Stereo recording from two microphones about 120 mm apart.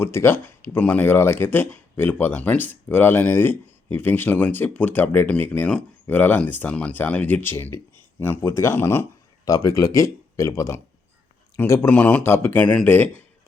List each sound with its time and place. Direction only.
0.0 s speech: 20° left (ahead or behind)